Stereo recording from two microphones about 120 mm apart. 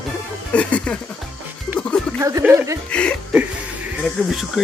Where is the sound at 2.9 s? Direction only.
10° left (ahead or behind).